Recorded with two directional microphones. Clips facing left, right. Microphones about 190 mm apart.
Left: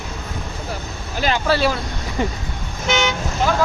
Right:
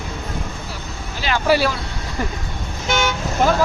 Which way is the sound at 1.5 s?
15° right (ahead or behind).